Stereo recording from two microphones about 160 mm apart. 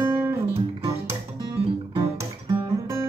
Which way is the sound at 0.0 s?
15° right (ahead or behind).